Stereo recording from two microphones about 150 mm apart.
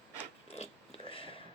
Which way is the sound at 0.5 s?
40° left (ahead or behind).